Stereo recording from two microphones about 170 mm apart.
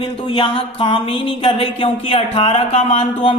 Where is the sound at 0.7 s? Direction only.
30° left (ahead or behind).